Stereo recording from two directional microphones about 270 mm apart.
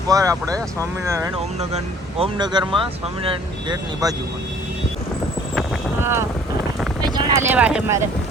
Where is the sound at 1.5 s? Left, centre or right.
Right.